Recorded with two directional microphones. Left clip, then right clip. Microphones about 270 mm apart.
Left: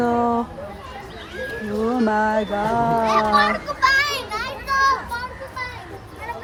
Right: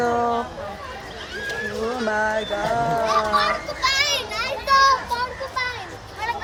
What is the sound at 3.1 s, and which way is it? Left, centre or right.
Speech, left.